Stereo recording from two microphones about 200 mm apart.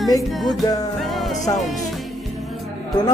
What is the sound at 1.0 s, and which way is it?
Music, centre (ahead or behind).